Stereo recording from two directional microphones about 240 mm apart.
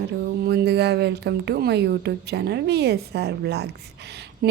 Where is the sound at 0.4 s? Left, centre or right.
Right.